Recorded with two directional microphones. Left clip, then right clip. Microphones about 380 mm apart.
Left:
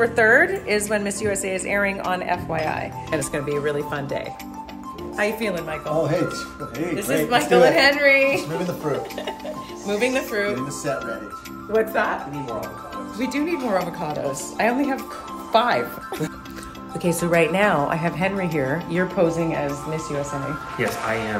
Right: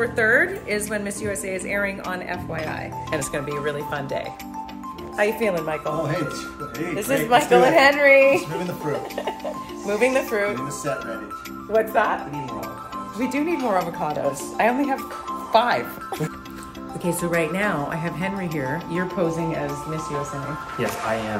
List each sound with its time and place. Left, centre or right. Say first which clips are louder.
0.0 s a woman's voice: left 3 dB; centre
5.1 s speech: right 2 dB; centre
7.2 s a woman's voice: even; centre
9.8 s a woman's voice: right 2 dB; centre
10.5 s speech: left 1 dB; centre
13.2 s a woman's voice: right 1 dB; centre
17.0 s a woman's voice: left 4 dB; centre